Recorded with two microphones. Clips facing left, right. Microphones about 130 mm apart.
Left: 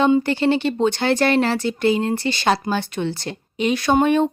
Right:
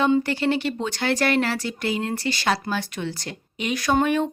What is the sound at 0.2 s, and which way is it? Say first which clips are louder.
Speech: left 4 dB; 25° left (ahead or behind).